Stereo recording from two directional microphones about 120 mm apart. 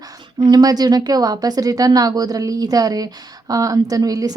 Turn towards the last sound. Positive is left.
turn(degrees=-30)  # may be behind; listen again after turning